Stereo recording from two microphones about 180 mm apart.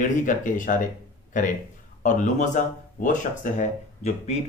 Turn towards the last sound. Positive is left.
turn(degrees=40)  # may be behind; listen again after turning